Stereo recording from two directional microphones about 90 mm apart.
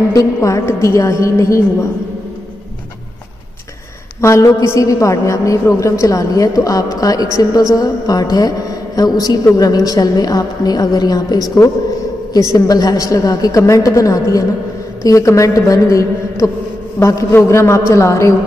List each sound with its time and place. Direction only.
0.1 s a woman's voice: 40° left (ahead or behind)
4.2 s a woman's voice: 35° left (ahead or behind)
12.5 s a woman's voice: 45° left (ahead or behind)